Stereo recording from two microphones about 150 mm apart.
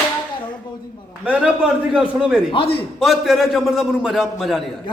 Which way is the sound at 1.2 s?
5° right (ahead or behind).